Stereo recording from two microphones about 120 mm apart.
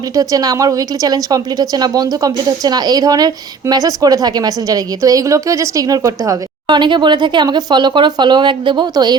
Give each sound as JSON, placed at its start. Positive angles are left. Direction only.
{"t": 0.2, "sound": "a woman's voice", "side_deg": -30}